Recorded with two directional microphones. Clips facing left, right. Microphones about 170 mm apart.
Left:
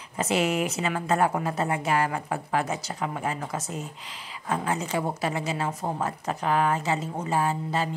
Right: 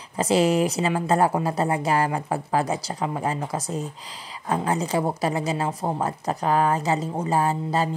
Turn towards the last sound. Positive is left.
turn(degrees=-35)  # may be behind; listen again after turning